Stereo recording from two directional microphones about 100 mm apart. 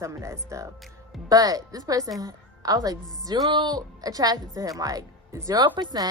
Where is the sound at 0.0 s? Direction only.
30° right (ahead or behind).